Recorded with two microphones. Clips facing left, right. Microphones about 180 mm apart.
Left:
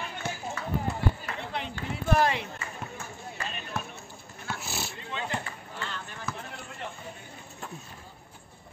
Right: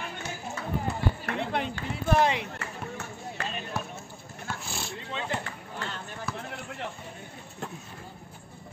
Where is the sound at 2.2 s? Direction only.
15° right (ahead or behind).